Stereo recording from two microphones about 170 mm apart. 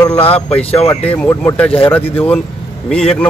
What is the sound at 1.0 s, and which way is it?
A man's voice, 10° left (ahead or behind).